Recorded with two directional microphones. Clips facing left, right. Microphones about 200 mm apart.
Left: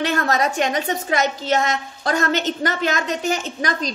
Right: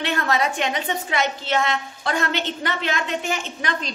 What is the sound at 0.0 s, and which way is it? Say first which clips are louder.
A woman's voice: left 2 dB; 45° left (ahead or behind).